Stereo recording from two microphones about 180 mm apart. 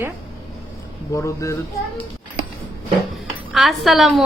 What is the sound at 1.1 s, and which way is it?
Speech, 15° left (ahead or behind).